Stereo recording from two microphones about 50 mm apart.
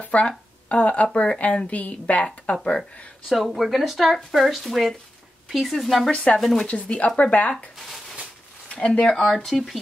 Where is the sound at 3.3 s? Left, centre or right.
Centre.